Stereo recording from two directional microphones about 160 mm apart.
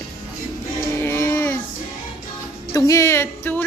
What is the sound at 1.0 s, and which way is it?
Music, 15° left (ahead or behind).